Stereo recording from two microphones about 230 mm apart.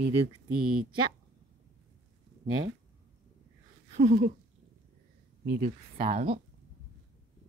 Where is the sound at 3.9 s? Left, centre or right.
Right.